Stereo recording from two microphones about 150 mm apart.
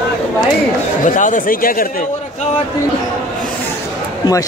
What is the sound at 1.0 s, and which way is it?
Speech, 60° left (ahead or behind).